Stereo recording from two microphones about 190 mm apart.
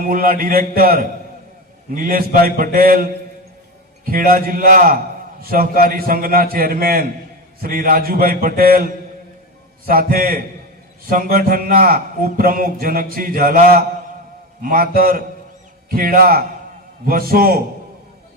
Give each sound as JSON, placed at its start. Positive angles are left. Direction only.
{"t": 0.1, "sound": "a man's voice", "side_deg": -50}